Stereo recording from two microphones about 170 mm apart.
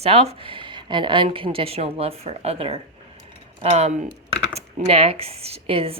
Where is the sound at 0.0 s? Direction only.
35° right (ahead or behind).